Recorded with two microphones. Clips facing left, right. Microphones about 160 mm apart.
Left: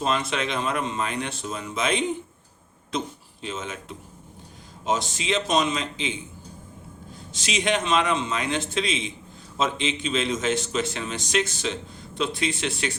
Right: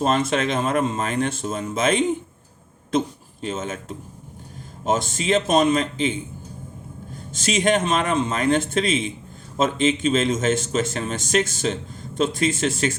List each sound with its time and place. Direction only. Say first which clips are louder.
0.0 s a man's voice: right 5 dB; 45° right (ahead or behind)
3.4 s a man's voice: right 5 dB; 45° right (ahead or behind)
7.3 s a man's voice: right 5 dB; 45° right (ahead or behind)